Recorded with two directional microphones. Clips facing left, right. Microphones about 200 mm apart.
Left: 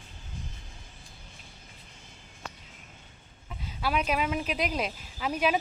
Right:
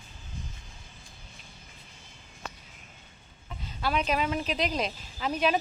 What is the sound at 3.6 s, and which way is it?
Speech, 10° left (ahead or behind).